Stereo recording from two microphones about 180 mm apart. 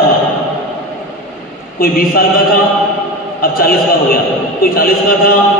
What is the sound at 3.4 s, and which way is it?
A man's voice, 55° left (ahead or behind).